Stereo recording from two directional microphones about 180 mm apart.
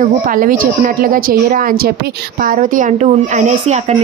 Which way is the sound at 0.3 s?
50° right (ahead or behind).